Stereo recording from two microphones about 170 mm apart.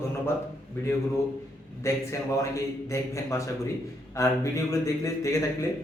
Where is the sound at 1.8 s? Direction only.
15° left (ahead or behind).